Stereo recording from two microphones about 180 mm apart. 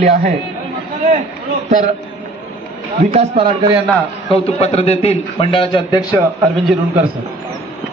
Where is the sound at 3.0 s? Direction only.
35° right (ahead or behind).